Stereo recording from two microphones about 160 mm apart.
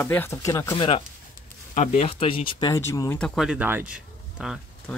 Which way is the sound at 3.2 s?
Centre (ahead or behind).